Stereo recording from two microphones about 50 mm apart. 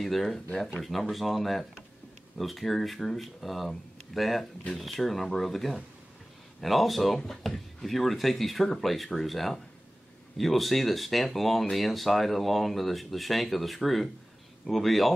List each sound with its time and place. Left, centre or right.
0.0 s speech: centre